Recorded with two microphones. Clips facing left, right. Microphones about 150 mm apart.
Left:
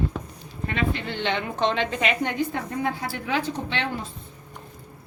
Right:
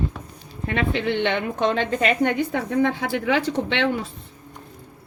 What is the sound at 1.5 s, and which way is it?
Speech, 50° right (ahead or behind).